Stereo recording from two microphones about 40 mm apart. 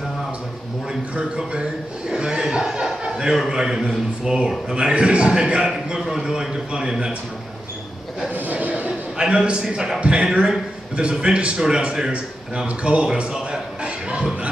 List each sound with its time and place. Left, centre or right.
1.1 s chuckle: right
3.3 s speech: centre
4.7 s a man's voice: right
8.4 s a sound: right
9.2 s a man's voice: right
13.2 s a sound: right